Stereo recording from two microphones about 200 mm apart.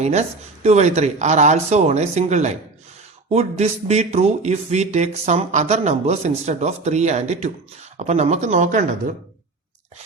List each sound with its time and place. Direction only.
0.0 s speech: 35° right (ahead or behind)